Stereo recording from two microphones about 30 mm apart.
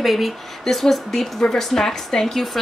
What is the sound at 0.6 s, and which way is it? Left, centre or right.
A woman's voice, centre.